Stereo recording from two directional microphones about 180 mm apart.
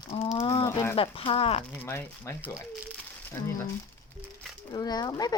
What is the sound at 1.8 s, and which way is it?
Speech, 15° left (ahead or behind).